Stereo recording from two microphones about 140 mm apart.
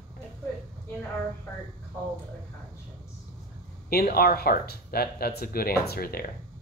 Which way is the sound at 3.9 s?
90° left.